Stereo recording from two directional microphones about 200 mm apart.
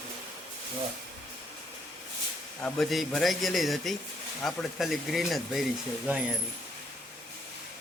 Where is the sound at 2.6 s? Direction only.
5° left (ahead or behind).